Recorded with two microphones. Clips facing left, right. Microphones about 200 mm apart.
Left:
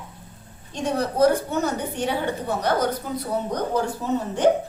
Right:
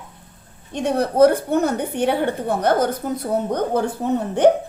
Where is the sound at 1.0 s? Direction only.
60° right (ahead or behind).